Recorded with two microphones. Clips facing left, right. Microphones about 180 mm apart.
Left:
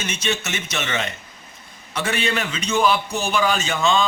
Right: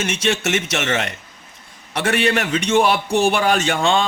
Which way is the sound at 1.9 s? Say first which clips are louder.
Right 5 dB; 75° right (ahead or behind).